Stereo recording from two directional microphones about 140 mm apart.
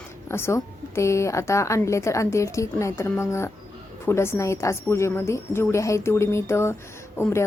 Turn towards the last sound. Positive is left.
turn(degrees=15)  # may be behind; listen again after turning